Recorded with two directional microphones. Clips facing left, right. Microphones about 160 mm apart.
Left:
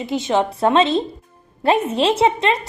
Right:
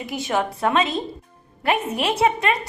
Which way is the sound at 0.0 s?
25° left (ahead or behind).